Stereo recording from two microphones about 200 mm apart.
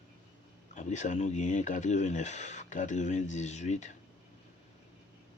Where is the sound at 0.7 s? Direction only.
35° left (ahead or behind).